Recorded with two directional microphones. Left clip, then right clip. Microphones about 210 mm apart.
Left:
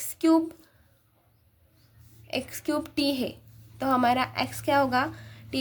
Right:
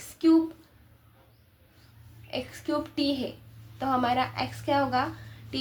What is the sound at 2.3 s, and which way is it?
A woman's voice, 45° left (ahead or behind).